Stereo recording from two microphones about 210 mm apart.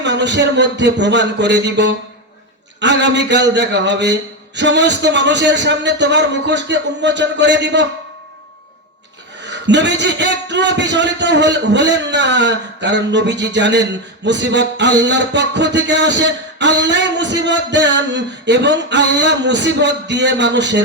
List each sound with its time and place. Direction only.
0.0 s music: 55° right (ahead or behind)
9.4 s music: 55° right (ahead or behind)